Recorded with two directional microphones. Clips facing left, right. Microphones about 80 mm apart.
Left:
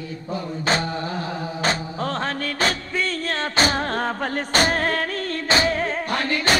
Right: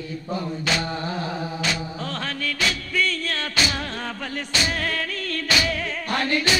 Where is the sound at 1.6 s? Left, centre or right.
Left.